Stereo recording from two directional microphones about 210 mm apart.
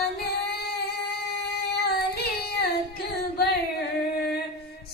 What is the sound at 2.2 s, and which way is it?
Child singing, 50° left (ahead or behind).